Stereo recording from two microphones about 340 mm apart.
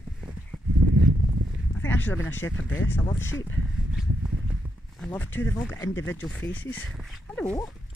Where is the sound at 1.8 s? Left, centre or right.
Centre.